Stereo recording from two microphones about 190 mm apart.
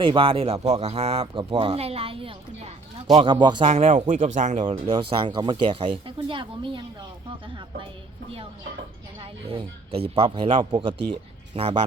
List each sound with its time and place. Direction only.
0.0 s speech: 25° right (ahead or behind)
3.7 s speech: 35° right (ahead or behind)
4.6 s speech: 25° right (ahead or behind)
9.1 s speech: 25° right (ahead or behind)